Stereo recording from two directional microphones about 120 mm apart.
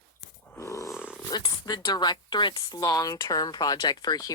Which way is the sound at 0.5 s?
25° left (ahead or behind).